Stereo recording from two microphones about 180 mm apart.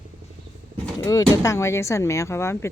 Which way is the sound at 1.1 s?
20° left (ahead or behind).